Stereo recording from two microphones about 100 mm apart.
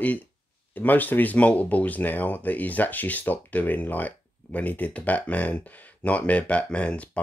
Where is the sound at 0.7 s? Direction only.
20° left (ahead or behind).